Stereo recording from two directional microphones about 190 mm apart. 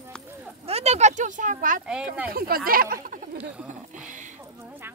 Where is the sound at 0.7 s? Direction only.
35° right (ahead or behind).